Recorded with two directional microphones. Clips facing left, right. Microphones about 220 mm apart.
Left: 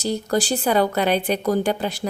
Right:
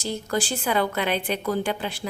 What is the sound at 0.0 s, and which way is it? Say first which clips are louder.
A woman's voice: left 5 dB; 40° left (ahead or behind).